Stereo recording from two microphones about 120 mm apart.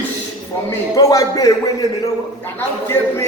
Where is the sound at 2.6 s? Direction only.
20° left (ahead or behind).